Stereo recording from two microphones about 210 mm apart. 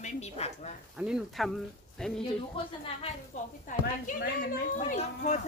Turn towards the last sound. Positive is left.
turn(degrees=35)  # may be behind; listen again after turning